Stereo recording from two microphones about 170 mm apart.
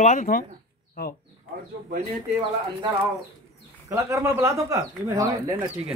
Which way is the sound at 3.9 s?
15° right (ahead or behind).